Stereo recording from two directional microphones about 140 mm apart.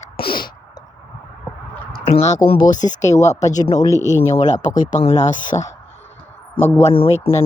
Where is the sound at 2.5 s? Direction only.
75° left (ahead or behind).